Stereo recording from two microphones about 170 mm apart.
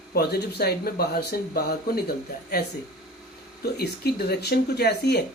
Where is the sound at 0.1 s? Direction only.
70° left (ahead or behind).